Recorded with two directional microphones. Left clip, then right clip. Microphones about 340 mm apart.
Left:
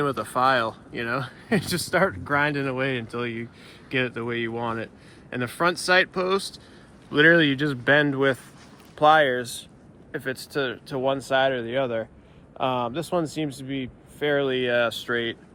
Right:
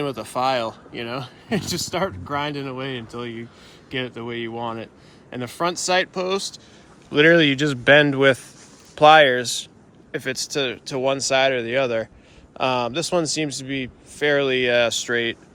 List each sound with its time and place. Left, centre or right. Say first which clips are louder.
0.0 s speech: left 1 dB; right